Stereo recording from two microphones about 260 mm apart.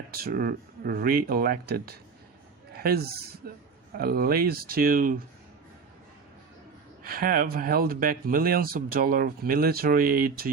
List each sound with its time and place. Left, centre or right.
0.1 s speech: right
7.0 s speech: right